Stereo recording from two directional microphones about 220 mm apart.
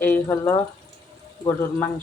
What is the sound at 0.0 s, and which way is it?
Speech, 10° left (ahead or behind).